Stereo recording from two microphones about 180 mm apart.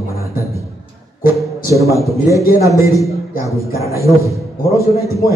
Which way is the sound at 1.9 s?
15° left (ahead or behind).